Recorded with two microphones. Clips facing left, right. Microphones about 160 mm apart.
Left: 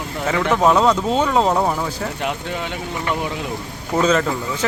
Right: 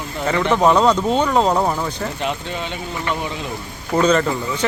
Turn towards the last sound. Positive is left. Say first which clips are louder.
# right 1 dB
turn(degrees=0)  # may be behind; listen again after turning